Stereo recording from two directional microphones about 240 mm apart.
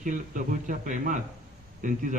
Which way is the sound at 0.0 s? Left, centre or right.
Right.